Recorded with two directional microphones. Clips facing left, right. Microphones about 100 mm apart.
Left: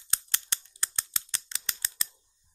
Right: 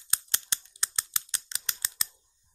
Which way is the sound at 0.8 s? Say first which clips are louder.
Right 2 dB; 20° right (ahead or behind).